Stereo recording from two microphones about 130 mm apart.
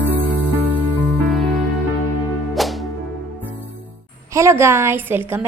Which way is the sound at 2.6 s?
Centre (ahead or behind).